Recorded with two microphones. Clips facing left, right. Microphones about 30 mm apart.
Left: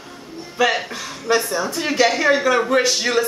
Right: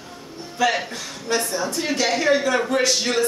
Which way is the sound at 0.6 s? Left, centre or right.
Centre.